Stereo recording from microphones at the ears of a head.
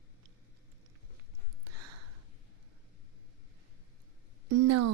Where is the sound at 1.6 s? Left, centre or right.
Right.